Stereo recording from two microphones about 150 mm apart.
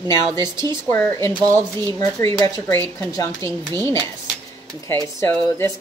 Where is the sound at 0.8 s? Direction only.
20° left (ahead or behind).